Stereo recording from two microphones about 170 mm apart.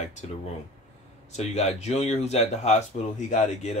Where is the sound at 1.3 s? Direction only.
40° left (ahead or behind).